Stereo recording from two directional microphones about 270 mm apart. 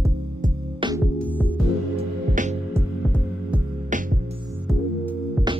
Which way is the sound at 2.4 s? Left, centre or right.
Right.